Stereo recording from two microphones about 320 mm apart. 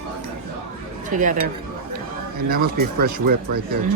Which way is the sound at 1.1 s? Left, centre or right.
Right.